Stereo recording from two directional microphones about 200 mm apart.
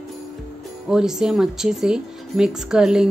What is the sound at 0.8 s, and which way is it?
Speech, 5° right (ahead or behind).